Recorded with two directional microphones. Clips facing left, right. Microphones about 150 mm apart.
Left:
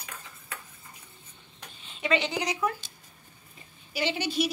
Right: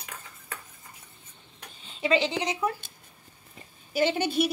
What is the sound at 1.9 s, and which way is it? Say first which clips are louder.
Speech: right 2 dB; 30° right (ahead or behind).